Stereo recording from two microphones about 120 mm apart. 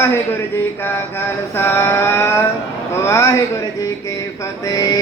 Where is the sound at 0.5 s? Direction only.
20° left (ahead or behind).